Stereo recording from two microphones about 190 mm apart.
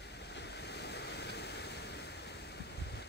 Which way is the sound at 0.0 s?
65° left (ahead or behind).